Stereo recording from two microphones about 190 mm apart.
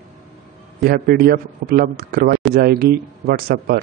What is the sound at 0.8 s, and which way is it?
Speech, 50° right (ahead or behind).